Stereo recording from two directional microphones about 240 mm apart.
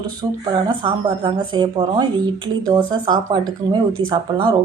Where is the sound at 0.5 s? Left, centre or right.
Centre.